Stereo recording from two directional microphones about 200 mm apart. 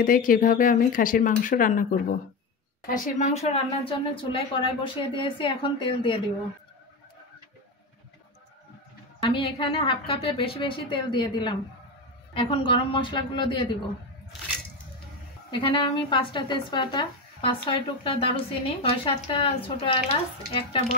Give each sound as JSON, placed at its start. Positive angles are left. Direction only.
{"t": 0.0, "sound": "a woman's voice", "side_deg": 45}
{"t": 9.2, "sound": "a woman's voice", "side_deg": 25}
{"t": 15.6, "sound": "a woman's voice", "side_deg": 25}